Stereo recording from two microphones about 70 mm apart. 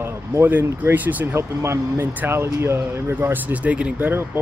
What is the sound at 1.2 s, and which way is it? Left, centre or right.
Speech, right.